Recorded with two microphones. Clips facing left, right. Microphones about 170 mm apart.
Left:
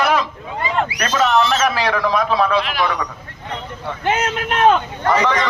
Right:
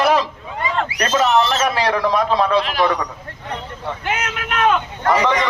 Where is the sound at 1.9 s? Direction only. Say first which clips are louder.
Right 1 dB; 20° right (ahead or behind).